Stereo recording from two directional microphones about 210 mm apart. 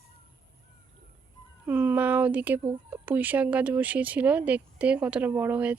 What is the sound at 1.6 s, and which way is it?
Speech, 10° right (ahead or behind).